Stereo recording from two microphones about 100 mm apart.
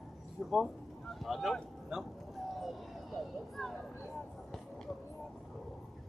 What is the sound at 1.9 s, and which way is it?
Speech, 5° right (ahead or behind).